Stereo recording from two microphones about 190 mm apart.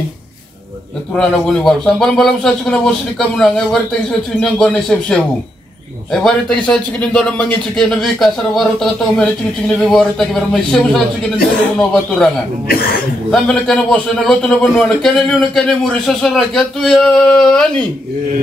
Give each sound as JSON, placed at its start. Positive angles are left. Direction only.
{"t": 1.1, "sound": "a man's voice", "side_deg": 0}
{"t": 6.2, "sound": "a man's voice", "side_deg": 5}
{"t": 12.6, "sound": "speech", "side_deg": 50}
{"t": 13.3, "sound": "a man's voice", "side_deg": 5}